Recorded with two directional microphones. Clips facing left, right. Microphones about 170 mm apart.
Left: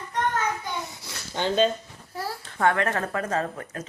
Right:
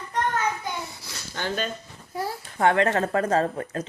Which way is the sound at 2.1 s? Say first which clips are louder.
Right 2 dB; 20° right (ahead or behind).